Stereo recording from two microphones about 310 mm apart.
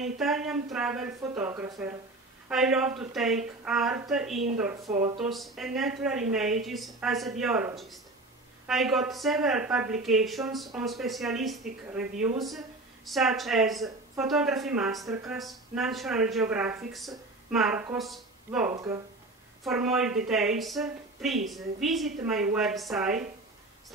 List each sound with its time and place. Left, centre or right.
0.0 s a woman's voice: centre
4.9 s speech: right
5.2 s a woman's voice: centre